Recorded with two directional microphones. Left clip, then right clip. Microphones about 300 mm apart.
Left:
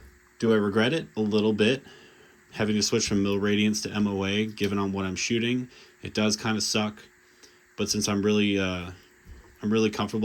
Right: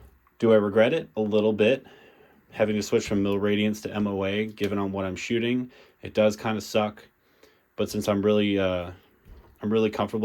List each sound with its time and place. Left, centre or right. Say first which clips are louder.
0.3 s speech: right 4 dB; centre